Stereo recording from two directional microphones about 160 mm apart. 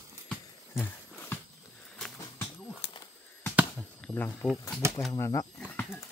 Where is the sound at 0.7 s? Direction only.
15° left (ahead or behind).